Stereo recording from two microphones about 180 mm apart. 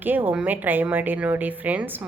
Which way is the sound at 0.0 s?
10° right (ahead or behind).